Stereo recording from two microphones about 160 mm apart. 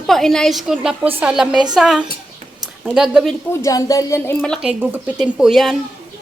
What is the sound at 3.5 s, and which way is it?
Speech, 20° left (ahead or behind).